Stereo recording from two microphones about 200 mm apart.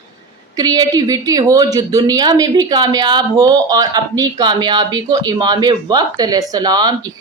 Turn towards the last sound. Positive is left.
turn(degrees=-20)  # may be behind; listen again after turning